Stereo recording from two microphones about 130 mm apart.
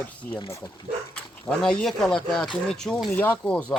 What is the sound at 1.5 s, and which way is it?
Speech, 5° left (ahead or behind).